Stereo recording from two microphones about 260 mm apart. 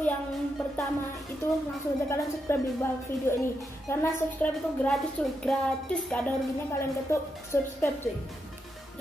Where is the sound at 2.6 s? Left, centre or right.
Centre.